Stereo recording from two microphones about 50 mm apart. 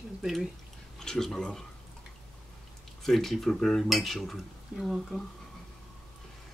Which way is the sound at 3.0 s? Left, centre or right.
Centre.